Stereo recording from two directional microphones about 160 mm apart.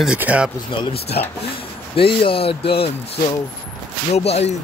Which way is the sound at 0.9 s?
80° left.